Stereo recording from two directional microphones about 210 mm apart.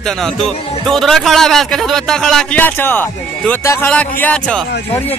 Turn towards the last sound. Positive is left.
turn(degrees=5)  # may be behind; listen again after turning